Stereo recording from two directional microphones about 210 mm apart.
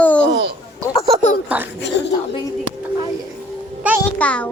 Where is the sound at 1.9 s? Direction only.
55° left (ahead or behind).